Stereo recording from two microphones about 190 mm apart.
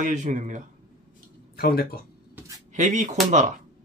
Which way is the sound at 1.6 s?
50° left (ahead or behind).